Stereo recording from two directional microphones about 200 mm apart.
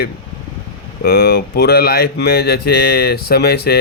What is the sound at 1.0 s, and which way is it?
Speech, 55° left (ahead or behind).